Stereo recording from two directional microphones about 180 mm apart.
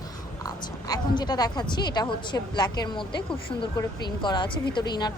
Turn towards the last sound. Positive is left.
turn(degrees=25)  # may be behind; listen again after turning